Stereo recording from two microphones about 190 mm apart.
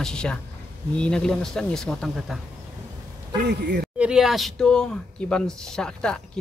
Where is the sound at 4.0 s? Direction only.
5° right (ahead or behind).